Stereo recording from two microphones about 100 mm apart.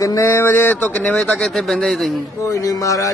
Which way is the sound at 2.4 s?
35° left (ahead or behind).